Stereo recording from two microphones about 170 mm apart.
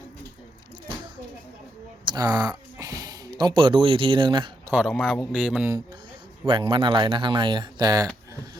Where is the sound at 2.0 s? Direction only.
25° right (ahead or behind).